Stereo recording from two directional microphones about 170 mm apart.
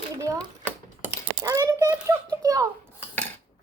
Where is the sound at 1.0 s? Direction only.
15° right (ahead or behind).